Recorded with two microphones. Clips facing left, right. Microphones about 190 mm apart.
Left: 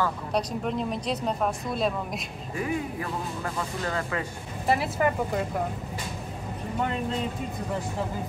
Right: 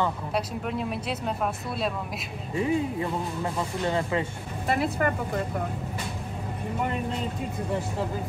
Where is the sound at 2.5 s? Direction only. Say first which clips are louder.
Right 4 dB; 25° right (ahead or behind).